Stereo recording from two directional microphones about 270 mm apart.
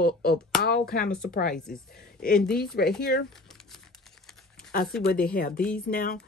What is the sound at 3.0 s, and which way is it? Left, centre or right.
Speech, left.